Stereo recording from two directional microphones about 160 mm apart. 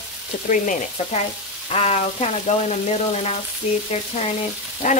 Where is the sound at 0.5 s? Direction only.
50° left (ahead or behind).